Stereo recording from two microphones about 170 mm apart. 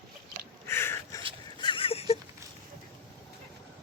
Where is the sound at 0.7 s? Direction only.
15° left (ahead or behind).